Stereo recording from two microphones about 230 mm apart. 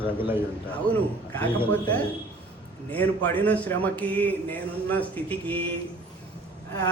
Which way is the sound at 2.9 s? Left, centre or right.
Centre.